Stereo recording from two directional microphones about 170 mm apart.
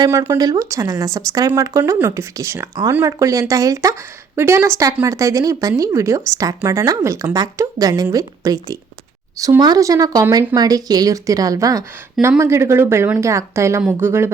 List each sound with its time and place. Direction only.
0.0 s a woman's voice: 20° right (ahead or behind)